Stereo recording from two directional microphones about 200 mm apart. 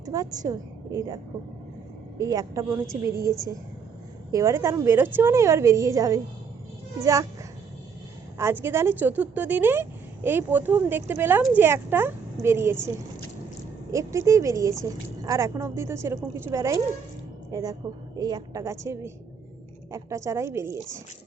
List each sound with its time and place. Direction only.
0.0 s a woman's voice: 15° right (ahead or behind)
8.4 s a woman's voice: 10° right (ahead or behind)
13.9 s a woman's voice: 15° right (ahead or behind)